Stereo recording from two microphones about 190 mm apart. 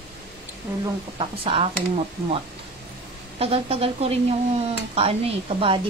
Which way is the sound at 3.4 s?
30° right (ahead or behind).